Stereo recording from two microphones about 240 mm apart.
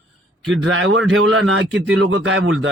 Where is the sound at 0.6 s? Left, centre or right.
Right.